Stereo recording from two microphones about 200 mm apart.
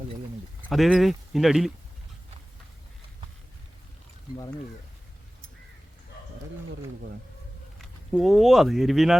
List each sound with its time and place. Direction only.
0.7 s speech: centre (ahead or behind)
7.8 s speech: centre (ahead or behind)